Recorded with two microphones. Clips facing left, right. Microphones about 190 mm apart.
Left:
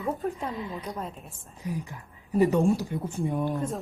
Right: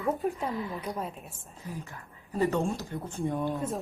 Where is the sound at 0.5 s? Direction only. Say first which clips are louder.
Even; 20° left (ahead or behind).